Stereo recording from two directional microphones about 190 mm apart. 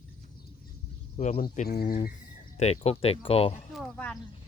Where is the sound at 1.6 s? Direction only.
55° left (ahead or behind).